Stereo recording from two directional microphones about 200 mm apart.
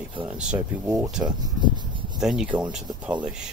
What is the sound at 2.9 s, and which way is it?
Speech, 20° right (ahead or behind).